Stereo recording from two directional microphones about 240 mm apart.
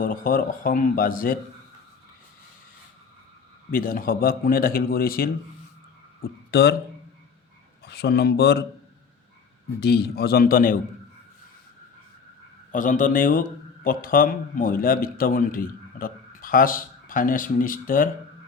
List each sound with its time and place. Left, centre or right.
0.0 s a man's voice: left
3.7 s a man's voice: left
7.9 s a man's voice: left
9.8 s a man's voice: left
12.7 s a man's voice: left